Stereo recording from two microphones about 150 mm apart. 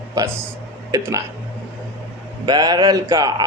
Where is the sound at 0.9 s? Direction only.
20° right (ahead or behind).